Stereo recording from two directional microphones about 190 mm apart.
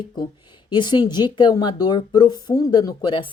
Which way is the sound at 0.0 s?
25° left (ahead or behind).